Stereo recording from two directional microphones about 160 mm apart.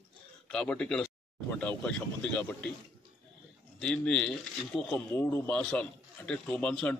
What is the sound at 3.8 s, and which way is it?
Speech, 5° left (ahead or behind).